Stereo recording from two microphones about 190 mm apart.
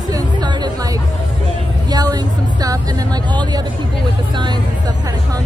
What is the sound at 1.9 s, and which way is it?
Music, 20° right (ahead or behind).